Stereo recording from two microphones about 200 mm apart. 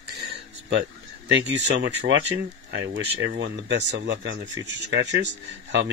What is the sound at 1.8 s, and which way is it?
Speech, 65° right (ahead or behind).